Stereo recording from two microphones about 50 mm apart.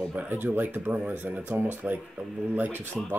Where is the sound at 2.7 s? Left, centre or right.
Right.